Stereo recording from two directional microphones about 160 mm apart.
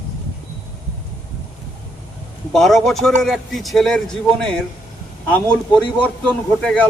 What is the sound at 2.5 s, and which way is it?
Speech, centre (ahead or behind).